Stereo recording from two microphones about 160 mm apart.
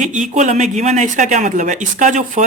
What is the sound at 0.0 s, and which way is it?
Speech, 50° right (ahead or behind).